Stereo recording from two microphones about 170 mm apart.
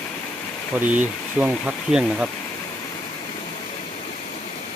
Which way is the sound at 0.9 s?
10° right (ahead or behind).